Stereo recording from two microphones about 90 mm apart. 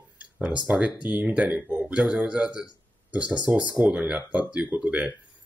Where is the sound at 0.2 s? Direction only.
15° right (ahead or behind).